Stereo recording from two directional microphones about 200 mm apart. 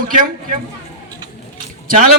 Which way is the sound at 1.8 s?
45° right (ahead or behind).